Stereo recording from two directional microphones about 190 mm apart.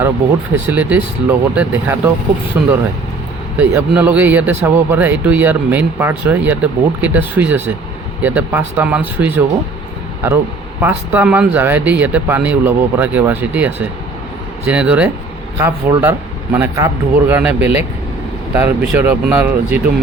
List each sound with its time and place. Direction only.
0.7 s speech: 10° right (ahead or behind)